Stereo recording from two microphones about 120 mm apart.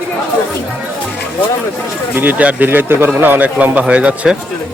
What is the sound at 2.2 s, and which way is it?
Speech, 15° right (ahead or behind).